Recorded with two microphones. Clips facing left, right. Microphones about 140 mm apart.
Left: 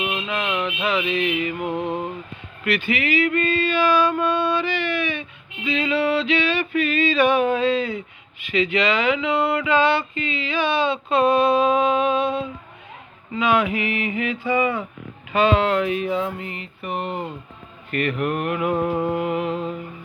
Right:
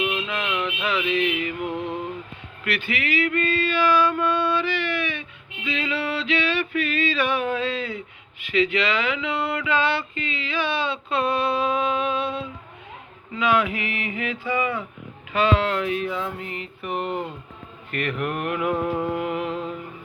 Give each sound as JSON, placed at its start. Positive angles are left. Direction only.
{"t": 0.3, "sound": "music", "side_deg": 20}
{"t": 0.5, "sound": "music", "side_deg": 30}
{"t": 0.9, "sound": "a sound", "side_deg": 15}
{"t": 1.6, "sound": "a sound", "side_deg": 25}
{"t": 16.4, "sound": "mantra", "side_deg": 5}
{"t": 16.8, "sound": "speech", "side_deg": -10}
{"t": 17.9, "sound": "mantra", "side_deg": 0}